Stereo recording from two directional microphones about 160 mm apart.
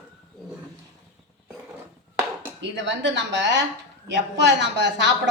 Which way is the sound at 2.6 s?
90° right.